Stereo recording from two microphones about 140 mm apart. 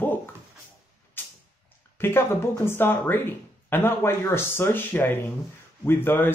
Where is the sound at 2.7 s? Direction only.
15° left (ahead or behind).